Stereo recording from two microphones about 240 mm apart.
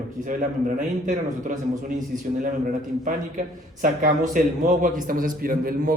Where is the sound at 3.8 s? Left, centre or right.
Right.